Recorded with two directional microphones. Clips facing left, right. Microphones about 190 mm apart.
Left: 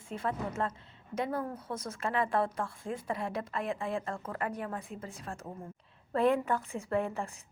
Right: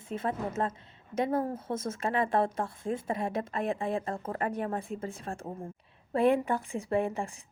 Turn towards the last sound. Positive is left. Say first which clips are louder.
# right 3 dB
turn(degrees=-15)  # may be behind; listen again after turning